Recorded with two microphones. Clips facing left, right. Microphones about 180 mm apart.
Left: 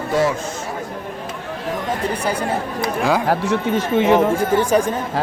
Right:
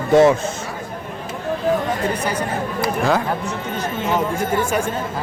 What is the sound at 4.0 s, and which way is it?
Speech, 70° left (ahead or behind).